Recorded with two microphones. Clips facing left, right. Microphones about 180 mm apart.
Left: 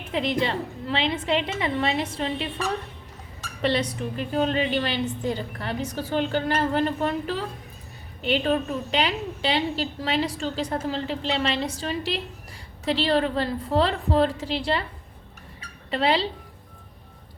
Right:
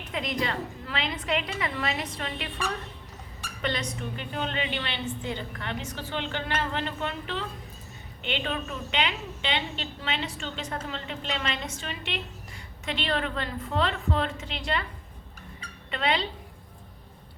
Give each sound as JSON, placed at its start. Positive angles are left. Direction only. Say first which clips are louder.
{"t": 0.1, "sound": "a woman's voice", "louder": "left 6 dB", "side_deg": 30}
{"t": 15.9, "sound": "a woman's voice", "louder": "left 5 dB", "side_deg": 35}